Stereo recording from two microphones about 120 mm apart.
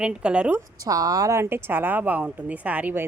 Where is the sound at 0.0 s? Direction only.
10° right (ahead or behind).